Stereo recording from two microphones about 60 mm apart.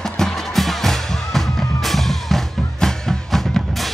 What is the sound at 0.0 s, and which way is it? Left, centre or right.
Music, centre.